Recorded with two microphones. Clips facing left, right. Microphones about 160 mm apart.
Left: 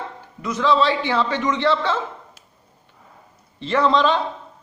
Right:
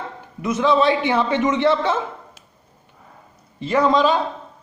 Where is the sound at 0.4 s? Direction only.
20° right (ahead or behind).